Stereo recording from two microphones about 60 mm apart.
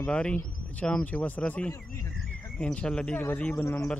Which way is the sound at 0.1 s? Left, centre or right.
Left.